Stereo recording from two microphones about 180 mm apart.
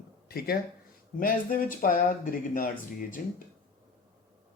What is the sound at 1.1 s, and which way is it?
Speech, 50° left (ahead or behind).